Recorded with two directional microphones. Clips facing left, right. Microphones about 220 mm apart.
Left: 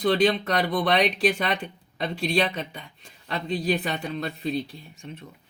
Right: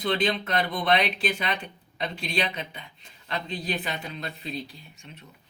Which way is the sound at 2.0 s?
40° left (ahead or behind).